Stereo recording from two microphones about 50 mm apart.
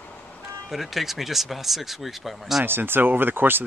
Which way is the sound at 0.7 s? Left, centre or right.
Centre.